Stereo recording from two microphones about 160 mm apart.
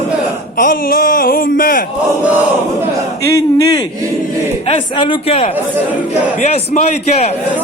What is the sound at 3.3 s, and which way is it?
Speech, 20° left (ahead or behind).